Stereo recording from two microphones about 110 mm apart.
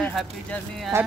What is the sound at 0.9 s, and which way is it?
Speech, 25° right (ahead or behind).